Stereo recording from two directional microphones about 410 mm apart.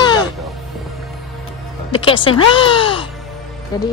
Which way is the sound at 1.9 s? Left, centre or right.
Centre.